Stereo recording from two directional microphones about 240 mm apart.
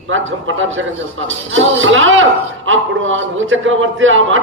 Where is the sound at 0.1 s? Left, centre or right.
Right.